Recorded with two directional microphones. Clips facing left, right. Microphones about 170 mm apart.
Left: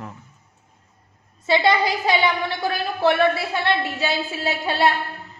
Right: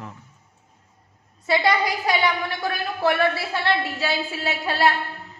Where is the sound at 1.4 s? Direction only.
25° left (ahead or behind).